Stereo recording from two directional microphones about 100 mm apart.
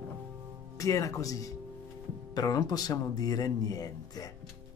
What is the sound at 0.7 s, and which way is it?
Speech, 35° left (ahead or behind).